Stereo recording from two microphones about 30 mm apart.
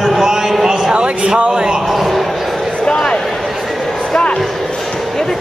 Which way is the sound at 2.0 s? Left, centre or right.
Centre.